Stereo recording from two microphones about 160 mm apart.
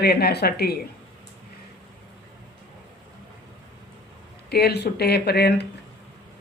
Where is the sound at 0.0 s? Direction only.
85° left.